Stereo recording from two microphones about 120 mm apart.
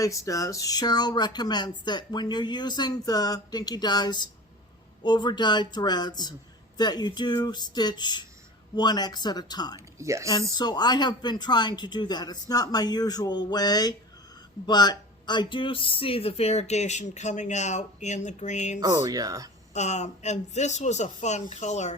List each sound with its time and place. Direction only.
0.0 s speech: 25° left (ahead or behind)
10.0 s speech: 25° right (ahead or behind)
10.6 s speech: 35° left (ahead or behind); by 18.8 s 80° left
18.8 s speech: 30° right (ahead or behind)
19.7 s speech: 70° left (ahead or behind)